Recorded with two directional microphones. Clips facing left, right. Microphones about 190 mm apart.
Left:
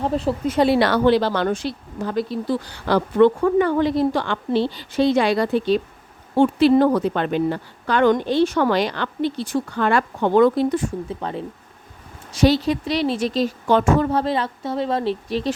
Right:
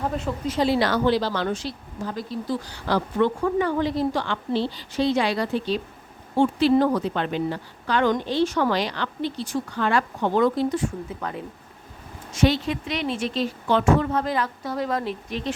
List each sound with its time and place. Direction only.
0.0 s speech: 30° left (ahead or behind)
0.4 s a woman's voice: 60° left (ahead or behind)
11.2 s speech: 30° left (ahead or behind)